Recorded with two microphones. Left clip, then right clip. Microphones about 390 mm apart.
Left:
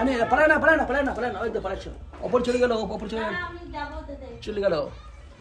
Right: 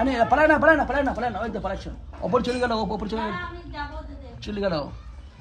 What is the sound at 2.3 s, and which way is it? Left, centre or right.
Speech, centre.